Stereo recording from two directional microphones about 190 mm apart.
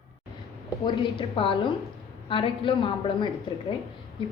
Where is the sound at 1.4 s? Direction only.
25° left (ahead or behind).